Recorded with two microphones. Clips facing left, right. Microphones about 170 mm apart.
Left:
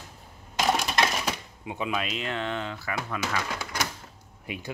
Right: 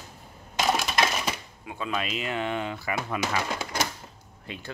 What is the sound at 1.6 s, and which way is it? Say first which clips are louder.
Speech: left 3 dB; 20° left (ahead or behind).